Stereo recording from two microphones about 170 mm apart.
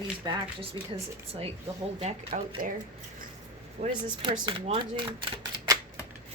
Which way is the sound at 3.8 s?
65° right (ahead or behind).